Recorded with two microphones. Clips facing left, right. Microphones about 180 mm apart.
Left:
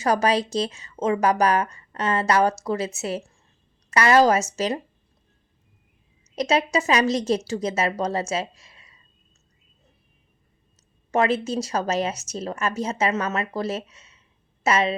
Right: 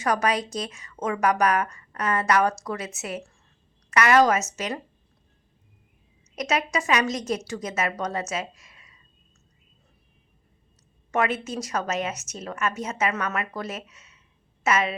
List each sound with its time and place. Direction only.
0.0 s a woman's voice: 30° left (ahead or behind)
6.3 s a woman's voice: 30° left (ahead or behind)
11.1 s a woman's voice: 30° left (ahead or behind)